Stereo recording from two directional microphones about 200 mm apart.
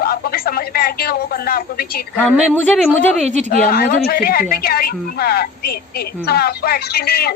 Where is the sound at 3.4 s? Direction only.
50° left (ahead or behind).